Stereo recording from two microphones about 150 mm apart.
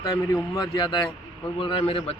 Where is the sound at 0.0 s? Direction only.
25° left (ahead or behind).